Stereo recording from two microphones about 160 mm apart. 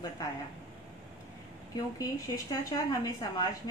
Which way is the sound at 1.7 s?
20° left (ahead or behind).